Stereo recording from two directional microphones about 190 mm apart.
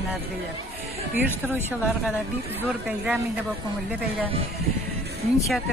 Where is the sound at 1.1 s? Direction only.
10° right (ahead or behind).